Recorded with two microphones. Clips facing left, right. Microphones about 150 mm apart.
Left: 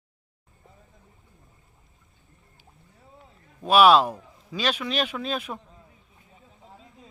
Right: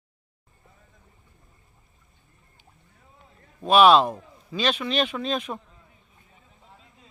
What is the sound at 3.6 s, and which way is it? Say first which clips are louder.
Speech: right 1 dB; 10° left (ahead or behind).